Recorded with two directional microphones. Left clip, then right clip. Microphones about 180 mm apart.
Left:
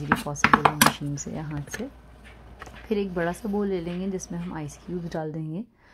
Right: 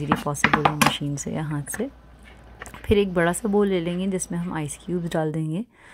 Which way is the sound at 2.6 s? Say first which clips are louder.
Right 7 dB; 25° right (ahead or behind).